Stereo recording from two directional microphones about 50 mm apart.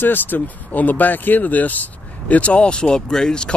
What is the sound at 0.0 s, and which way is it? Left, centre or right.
Speech, left.